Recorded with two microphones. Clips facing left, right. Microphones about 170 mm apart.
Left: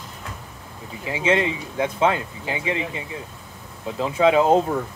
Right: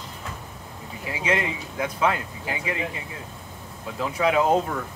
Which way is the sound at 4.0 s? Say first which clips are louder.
Left 4 dB; 25° left (ahead or behind).